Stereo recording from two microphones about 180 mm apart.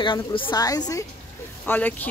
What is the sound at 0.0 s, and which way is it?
A woman's voice, 30° left (ahead or behind).